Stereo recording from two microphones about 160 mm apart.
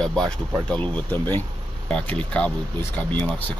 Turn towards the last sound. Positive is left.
turn(degrees=10)  # may be behind; listen again after turning